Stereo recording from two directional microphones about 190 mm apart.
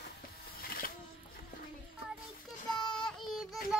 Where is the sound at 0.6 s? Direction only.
50° left (ahead or behind).